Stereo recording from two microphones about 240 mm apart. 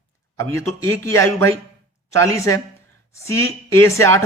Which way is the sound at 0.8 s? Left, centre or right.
Centre.